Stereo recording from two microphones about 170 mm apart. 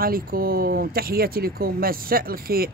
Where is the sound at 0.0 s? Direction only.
60° right (ahead or behind).